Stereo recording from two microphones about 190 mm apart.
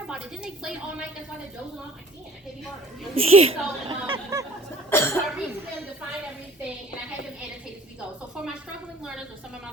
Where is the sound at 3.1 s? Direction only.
30° right (ahead or behind).